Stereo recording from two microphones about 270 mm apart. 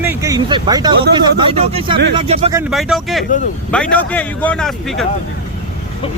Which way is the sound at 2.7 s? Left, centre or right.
Centre.